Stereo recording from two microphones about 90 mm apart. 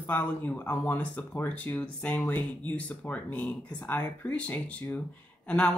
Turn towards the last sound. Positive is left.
turn(degrees=15)  # may be behind; listen again after turning